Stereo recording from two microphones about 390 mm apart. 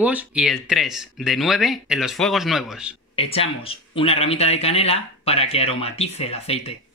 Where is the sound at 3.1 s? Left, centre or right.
Centre.